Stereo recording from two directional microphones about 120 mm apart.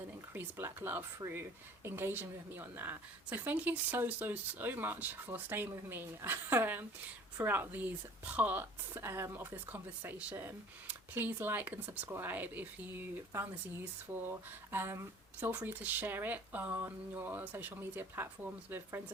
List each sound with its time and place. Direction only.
0.3 s speech: 20° right (ahead or behind)